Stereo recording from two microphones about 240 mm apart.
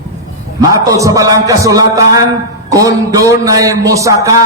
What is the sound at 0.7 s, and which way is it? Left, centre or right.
A man's voice, centre.